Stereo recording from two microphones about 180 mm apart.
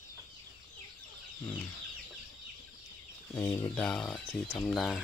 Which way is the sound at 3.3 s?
20° left (ahead or behind).